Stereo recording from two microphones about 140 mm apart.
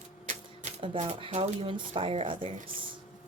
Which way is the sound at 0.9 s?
40° right (ahead or behind).